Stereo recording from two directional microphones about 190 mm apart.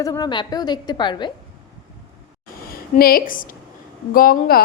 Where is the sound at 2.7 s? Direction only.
50° left (ahead or behind).